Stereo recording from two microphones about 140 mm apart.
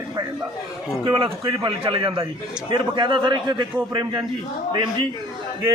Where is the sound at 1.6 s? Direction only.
40° right (ahead or behind).